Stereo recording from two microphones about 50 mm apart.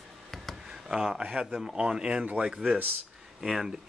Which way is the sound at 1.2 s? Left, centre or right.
Right.